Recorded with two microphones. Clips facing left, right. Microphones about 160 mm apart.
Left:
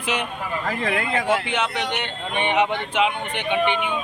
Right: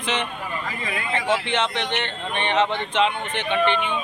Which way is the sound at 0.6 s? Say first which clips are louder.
Left 6 dB; 60° left (ahead or behind).